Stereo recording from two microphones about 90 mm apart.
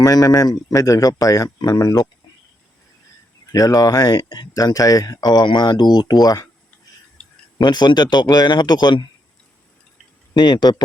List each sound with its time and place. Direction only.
0.0 s speech: 45° left (ahead or behind)
3.5 s speech: 40° left (ahead or behind)
6.2 s speech: 40° left (ahead or behind)
7.2 s tick-tock: 15° left (ahead or behind)
7.6 s speech: 55° left (ahead or behind)
10.3 s speech: 55° left (ahead or behind)